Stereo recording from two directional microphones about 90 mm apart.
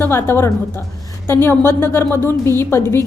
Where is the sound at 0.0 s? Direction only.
25° left (ahead or behind).